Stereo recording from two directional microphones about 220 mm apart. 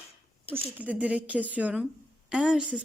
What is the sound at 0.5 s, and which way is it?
A woman's voice, 5° right (ahead or behind).